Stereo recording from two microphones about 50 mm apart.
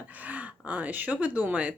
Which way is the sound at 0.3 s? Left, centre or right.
Right.